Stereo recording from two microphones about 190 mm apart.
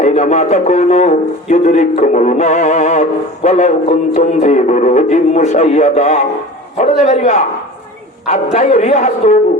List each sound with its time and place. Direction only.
0.0 s a man's voice: 40° left (ahead or behind)
8.5 s a man's voice: 40° left (ahead or behind)